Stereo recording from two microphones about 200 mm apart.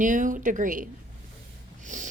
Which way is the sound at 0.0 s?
40° right (ahead or behind).